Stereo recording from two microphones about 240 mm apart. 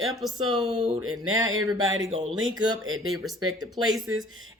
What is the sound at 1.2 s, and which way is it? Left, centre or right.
Speech, right.